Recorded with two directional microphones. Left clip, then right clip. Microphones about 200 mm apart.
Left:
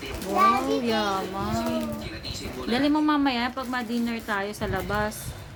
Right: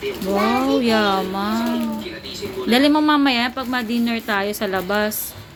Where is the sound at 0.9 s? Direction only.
35° right (ahead or behind).